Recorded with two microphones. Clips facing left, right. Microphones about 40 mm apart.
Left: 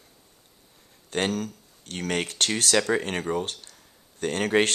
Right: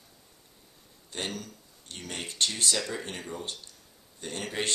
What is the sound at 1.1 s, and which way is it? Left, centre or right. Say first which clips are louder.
Speech: left 9 dB; left.